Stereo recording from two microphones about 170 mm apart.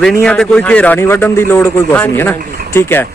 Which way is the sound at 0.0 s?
5° left (ahead or behind).